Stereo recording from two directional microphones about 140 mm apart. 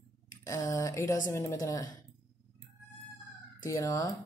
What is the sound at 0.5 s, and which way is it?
A woman's voice, 25° left (ahead or behind).